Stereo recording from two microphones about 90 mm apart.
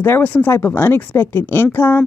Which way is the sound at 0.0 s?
20° left (ahead or behind).